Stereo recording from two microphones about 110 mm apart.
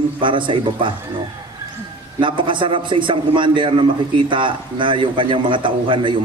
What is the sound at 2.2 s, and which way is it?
A man's voice, 50° right (ahead or behind).